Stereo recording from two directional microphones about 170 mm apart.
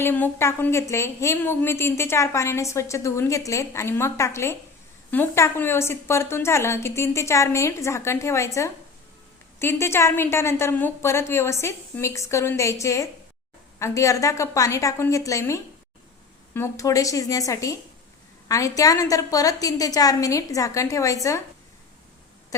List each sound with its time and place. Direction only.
0.0 s a woman's voice: 10° left (ahead or behind)